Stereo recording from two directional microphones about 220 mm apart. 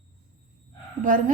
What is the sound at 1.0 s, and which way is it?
Speech, 40° right (ahead or behind).